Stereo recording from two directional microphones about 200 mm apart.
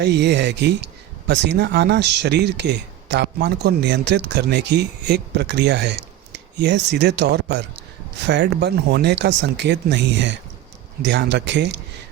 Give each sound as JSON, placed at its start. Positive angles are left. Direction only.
{"t": 0.0, "sound": "speech", "side_deg": -55}